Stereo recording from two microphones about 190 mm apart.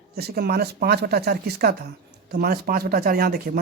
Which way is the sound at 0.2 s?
55° right (ahead or behind).